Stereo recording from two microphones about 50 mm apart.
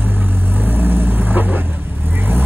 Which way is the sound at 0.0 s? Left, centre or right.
Right.